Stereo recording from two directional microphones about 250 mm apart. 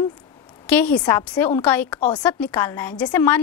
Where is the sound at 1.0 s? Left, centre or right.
Centre.